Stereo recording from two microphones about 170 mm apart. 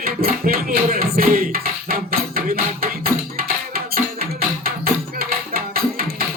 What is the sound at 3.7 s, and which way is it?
Music, 60° right (ahead or behind).